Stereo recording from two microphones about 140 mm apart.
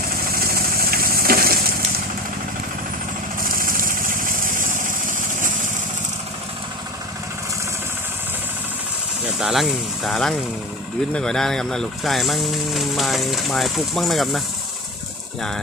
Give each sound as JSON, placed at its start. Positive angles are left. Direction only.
{"t": 0.5, "sound": "vehicle", "side_deg": -90}
{"t": 3.4, "sound": "vehicle", "side_deg": -90}
{"t": 9.4, "sound": "speech", "side_deg": 0}